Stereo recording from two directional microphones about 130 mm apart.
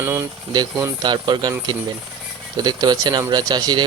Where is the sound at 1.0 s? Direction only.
35° right (ahead or behind).